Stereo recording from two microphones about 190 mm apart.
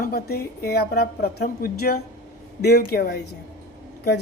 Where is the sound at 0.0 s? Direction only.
55° left (ahead or behind).